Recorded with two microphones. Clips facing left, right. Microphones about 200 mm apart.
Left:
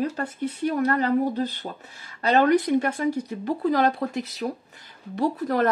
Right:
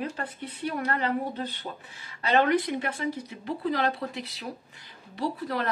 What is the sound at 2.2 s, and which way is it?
Speech, 40° left (ahead or behind).